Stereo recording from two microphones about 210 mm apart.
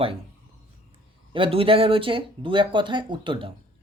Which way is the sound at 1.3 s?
25° right (ahead or behind).